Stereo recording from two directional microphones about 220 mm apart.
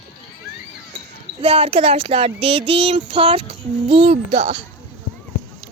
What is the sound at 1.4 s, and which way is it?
Speech, 25° right (ahead or behind).